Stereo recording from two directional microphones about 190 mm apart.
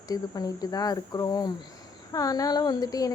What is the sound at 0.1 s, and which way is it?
Speech, 20° left (ahead or behind).